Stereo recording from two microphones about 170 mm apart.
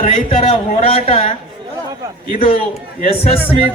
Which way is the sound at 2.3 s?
35° left (ahead or behind).